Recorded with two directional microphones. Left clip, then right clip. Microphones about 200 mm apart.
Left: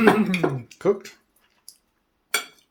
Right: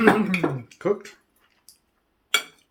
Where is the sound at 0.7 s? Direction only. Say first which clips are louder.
Left 2 dB; 45° left (ahead or behind).